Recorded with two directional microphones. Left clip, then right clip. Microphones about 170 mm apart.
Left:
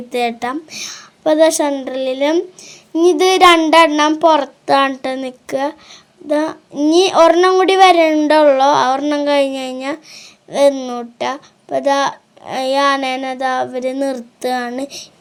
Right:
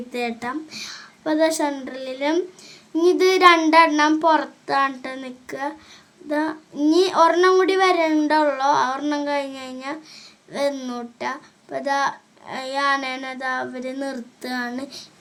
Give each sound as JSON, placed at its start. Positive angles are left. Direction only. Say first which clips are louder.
{"t": 0.1, "sound": "a woman's voice", "louder": "left 9 dB", "side_deg": 35}
{"t": 6.2, "sound": "child singing", "louder": "left 7 dB", "side_deg": 30}
{"t": 6.9, "sound": "a woman's voice", "louder": "left 7 dB", "side_deg": 30}
{"t": 9.0, "sound": "a woman's voice", "louder": "left 9 dB", "side_deg": 25}